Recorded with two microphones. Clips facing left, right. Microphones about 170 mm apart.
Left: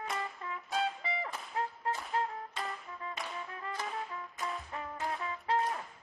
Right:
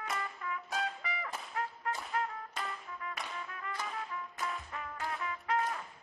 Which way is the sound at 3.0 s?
25° left (ahead or behind).